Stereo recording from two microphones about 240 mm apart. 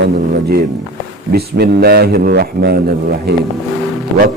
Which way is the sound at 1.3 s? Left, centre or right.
Right.